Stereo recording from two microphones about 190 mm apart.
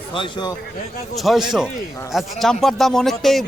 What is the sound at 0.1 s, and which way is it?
Speech, 25° left (ahead or behind).